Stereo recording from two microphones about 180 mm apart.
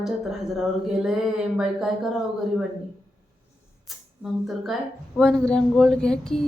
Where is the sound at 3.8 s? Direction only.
Centre (ahead or behind).